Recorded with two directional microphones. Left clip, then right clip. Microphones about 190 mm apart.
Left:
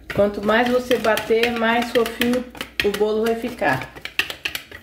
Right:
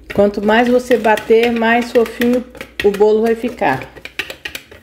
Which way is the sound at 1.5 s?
30° right (ahead or behind).